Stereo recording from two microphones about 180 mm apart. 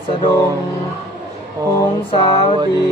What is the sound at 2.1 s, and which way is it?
Speech, 35° left (ahead or behind).